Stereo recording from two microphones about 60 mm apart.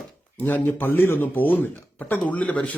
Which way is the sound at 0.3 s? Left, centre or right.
Left.